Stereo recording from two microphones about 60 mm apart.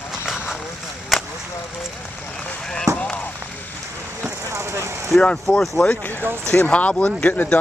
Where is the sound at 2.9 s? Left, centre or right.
Left.